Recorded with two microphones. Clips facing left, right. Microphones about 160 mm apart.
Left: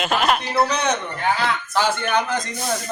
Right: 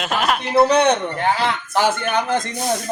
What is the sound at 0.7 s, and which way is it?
Speech, 60° right (ahead or behind).